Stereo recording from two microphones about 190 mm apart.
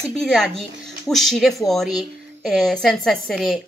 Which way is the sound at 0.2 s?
Centre (ahead or behind).